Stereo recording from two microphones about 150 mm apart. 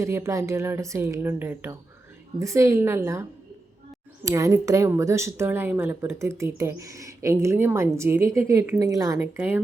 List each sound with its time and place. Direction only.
0.0 s a woman's voice: 20° right (ahead or behind)